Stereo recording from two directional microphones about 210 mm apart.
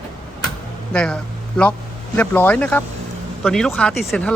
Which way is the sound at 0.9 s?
5° left (ahead or behind).